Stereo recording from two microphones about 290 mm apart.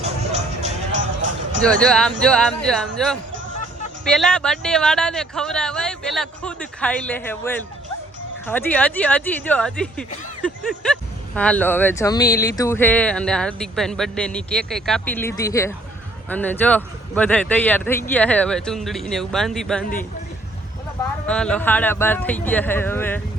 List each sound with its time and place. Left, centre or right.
0.0 s music: right
1.8 s speech: centre
4.0 s speech: centre
21.2 s speech: centre